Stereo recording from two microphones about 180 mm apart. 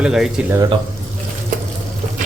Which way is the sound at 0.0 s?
5° right (ahead or behind).